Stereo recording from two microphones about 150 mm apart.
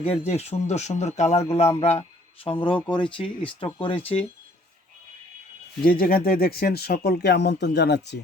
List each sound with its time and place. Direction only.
0.0 s speech: 45° left (ahead or behind)
5.8 s speech: 75° left (ahead or behind)